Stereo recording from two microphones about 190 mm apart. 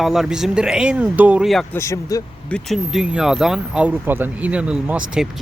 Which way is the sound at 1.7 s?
15° left (ahead or behind).